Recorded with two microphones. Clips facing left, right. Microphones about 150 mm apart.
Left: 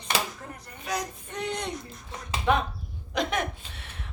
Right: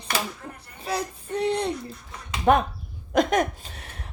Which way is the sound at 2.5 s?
45° right (ahead or behind).